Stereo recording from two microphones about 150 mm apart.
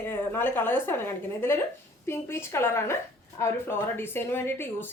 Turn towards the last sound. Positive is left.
turn(degrees=15)  # may be behind; listen again after turning